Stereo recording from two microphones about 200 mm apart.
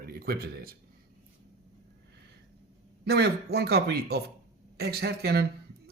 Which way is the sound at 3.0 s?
55° right (ahead or behind).